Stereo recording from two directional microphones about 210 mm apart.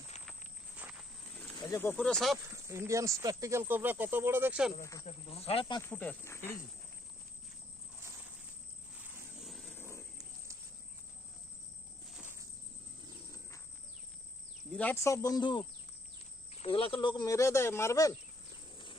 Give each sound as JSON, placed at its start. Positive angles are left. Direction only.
{"t": 0.1, "sound": "walk", "side_deg": 30}
{"t": 0.8, "sound": "walk", "side_deg": -5}
{"t": 1.7, "sound": "speech", "side_deg": 10}
{"t": 2.4, "sound": "speech", "side_deg": -15}
{"t": 4.8, "sound": "speech", "side_deg": 15}
{"t": 5.0, "sound": "speech", "side_deg": 30}
{"t": 5.9, "sound": "speech", "side_deg": 5}
{"t": 9.4, "sound": "vehicle", "side_deg": 0}
{"t": 12.0, "sound": "insect", "side_deg": -5}
{"t": 14.7, "sound": "speech", "side_deg": 5}